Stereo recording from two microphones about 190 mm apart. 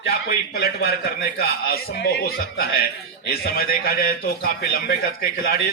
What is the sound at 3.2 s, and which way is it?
A man's voice, 55° left (ahead or behind).